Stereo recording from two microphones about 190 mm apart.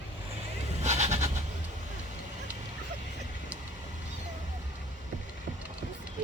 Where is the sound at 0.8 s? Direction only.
35° right (ahead or behind).